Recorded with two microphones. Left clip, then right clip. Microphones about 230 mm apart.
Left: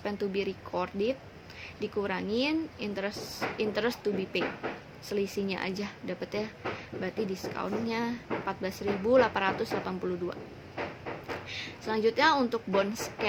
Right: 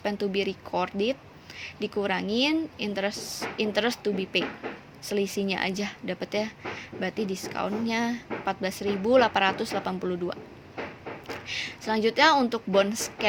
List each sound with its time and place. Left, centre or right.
0.0 s speech: right
11.4 s speech: right